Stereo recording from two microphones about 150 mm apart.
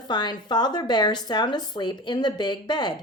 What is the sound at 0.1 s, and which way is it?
Speech, 30° left (ahead or behind).